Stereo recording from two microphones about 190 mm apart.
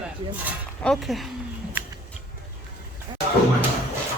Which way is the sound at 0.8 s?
Centre (ahead or behind).